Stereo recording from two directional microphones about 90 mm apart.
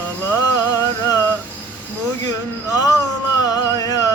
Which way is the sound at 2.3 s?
45° left (ahead or behind).